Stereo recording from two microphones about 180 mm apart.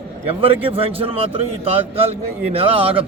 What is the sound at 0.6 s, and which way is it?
A man's voice, 30° right (ahead or behind).